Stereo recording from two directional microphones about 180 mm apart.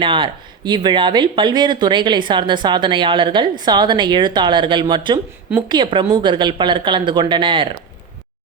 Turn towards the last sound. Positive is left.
turn(degrees=-25)  # may be behind; listen again after turning